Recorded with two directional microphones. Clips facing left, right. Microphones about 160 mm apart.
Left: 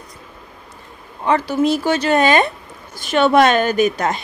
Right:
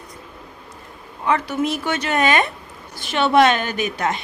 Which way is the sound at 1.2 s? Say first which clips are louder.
Left 4 dB; 30° left (ahead or behind).